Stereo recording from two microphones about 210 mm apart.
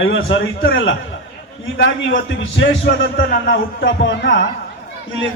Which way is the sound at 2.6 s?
60° left (ahead or behind).